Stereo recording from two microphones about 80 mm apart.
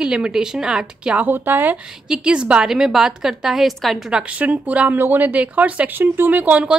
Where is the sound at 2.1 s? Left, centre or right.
Centre.